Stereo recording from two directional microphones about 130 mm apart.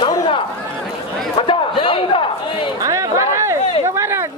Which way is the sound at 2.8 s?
25° right (ahead or behind).